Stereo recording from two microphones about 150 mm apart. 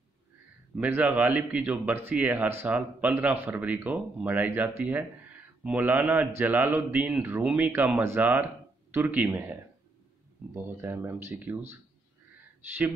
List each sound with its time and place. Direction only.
0.7 s speech: 10° right (ahead or behind)